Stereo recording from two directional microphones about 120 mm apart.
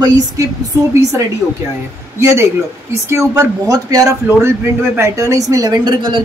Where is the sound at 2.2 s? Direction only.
20° right (ahead or behind).